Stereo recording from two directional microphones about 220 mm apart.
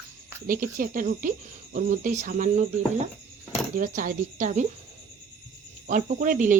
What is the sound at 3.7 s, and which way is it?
Speech, 40° right (ahead or behind).